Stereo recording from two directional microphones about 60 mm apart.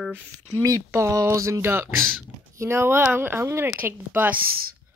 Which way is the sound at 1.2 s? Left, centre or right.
Right.